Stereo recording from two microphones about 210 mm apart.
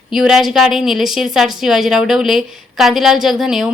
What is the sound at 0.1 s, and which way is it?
A woman's voice, centre (ahead or behind).